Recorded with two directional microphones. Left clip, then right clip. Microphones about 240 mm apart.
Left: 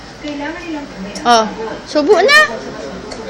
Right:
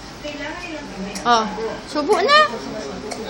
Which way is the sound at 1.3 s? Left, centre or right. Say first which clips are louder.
Left 6 dB; centre.